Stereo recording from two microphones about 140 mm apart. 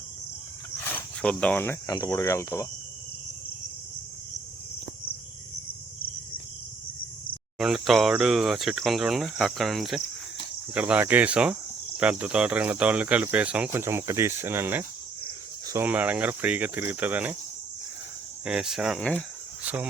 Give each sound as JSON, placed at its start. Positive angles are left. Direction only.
{"t": 0.8, "sound": "cricket", "side_deg": 15}
{"t": 2.0, "sound": "speech", "side_deg": 25}
{"t": 7.6, "sound": "cricket", "side_deg": 0}
{"t": 10.8, "sound": "speech", "side_deg": -10}
{"t": 13.8, "sound": "speech", "side_deg": -20}
{"t": 18.4, "sound": "cricket", "side_deg": -5}
{"t": 19.6, "sound": "cricket", "side_deg": -10}